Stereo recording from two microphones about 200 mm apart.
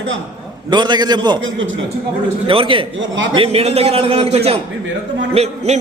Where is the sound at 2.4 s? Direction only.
25° right (ahead or behind).